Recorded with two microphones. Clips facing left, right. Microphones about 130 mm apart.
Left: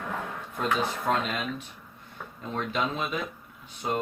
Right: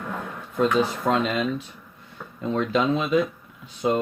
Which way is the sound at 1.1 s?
90° right.